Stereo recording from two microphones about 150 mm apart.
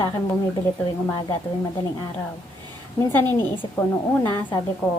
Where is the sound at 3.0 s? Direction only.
15° left (ahead or behind).